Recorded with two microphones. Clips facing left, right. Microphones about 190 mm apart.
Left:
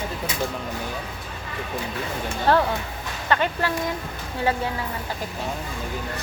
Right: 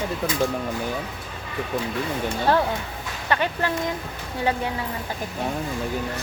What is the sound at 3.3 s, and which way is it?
Speech, 15° right (ahead or behind).